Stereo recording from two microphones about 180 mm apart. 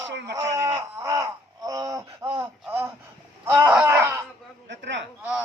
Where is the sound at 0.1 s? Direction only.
70° right (ahead or behind).